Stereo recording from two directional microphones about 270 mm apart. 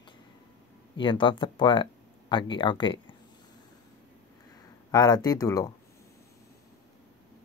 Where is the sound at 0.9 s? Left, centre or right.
Centre.